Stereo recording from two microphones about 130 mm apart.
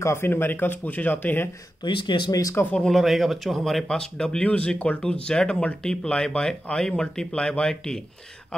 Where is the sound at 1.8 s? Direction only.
35° left (ahead or behind).